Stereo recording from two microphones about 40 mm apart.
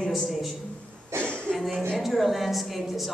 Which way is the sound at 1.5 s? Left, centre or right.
Centre.